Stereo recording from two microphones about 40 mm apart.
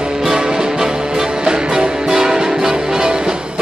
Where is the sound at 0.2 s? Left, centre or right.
Centre.